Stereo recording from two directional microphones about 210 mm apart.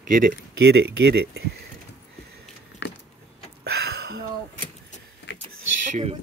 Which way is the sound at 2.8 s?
55° left (ahead or behind).